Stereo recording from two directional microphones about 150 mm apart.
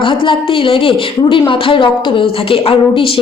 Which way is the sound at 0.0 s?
35° left (ahead or behind).